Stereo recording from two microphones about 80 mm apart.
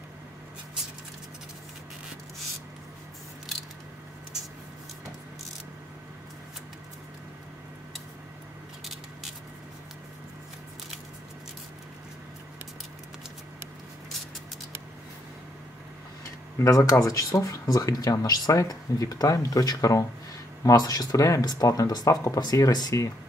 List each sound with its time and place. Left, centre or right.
16.5 s speech: left